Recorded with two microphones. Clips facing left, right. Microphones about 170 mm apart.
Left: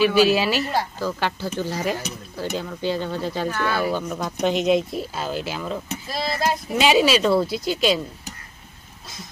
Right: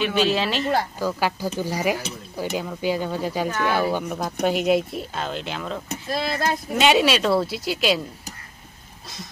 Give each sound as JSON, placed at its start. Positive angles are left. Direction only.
{"t": 0.0, "sound": "a woman's voice", "side_deg": 5}
{"t": 0.9, "sound": "speech", "side_deg": -10}
{"t": 5.9, "sound": "speech", "side_deg": -55}
{"t": 6.4, "sound": "speech", "side_deg": 0}